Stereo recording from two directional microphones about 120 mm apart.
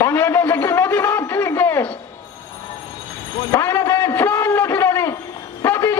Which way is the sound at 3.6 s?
20° left (ahead or behind).